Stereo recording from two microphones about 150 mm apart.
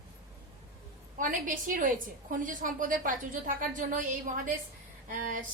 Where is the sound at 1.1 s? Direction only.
65° right (ahead or behind).